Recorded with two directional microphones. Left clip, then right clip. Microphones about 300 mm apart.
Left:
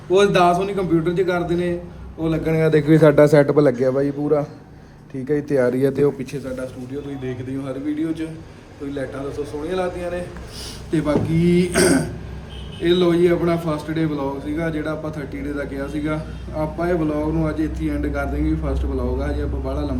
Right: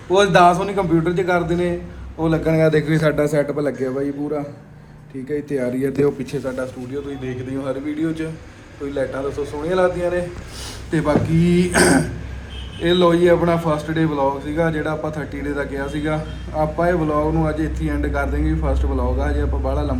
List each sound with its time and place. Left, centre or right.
0.1 s a man's voice: centre
2.5 s a man's voice: centre
5.3 s a man's voice: centre
6.3 s a man's voice: centre